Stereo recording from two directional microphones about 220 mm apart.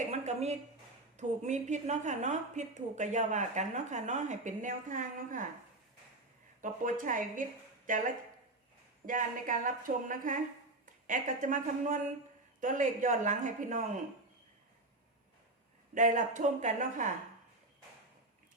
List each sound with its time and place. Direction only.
0.0 s a woman's voice: 30° right (ahead or behind)
6.6 s a woman's voice: 35° right (ahead or behind)
16.0 s a woman's voice: 35° right (ahead or behind)